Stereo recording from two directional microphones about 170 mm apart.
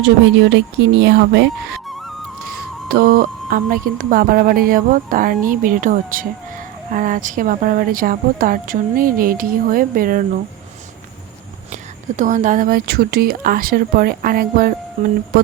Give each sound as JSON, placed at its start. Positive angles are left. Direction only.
{"t": 0.5, "sound": "speech", "side_deg": -90}
{"t": 2.9, "sound": "speech", "side_deg": -60}
{"t": 11.7, "sound": "speech", "side_deg": -50}